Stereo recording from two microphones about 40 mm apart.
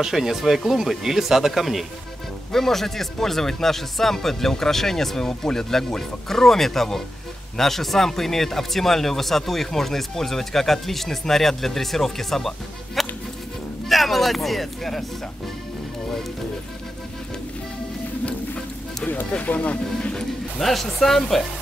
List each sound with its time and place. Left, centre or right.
0.0 s speech: centre
2.5 s speech: centre
19.4 s speech: left
20.0 s speech: left
20.5 s speech: centre